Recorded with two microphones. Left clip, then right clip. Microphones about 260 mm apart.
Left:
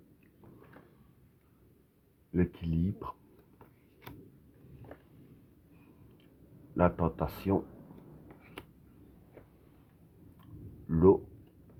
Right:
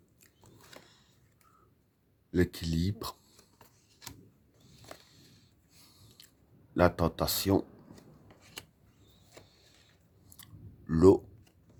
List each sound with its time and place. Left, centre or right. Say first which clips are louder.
2.3 s speech: right 3 dB; right
6.7 s speech: right 2 dB; right
10.4 s a sound: right 1 dB; right